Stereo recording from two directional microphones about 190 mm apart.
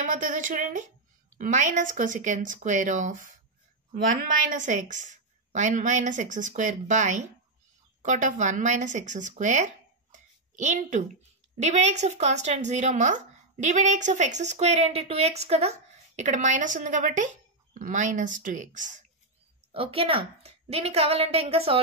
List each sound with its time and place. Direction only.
0.0 s speech: 45° right (ahead or behind)
4.5 s a woman's voice: 40° right (ahead or behind)
10.1 s a sound: 40° right (ahead or behind)
11.6 s a woman's voice: 35° right (ahead or behind)
19.7 s a woman's voice: 30° right (ahead or behind)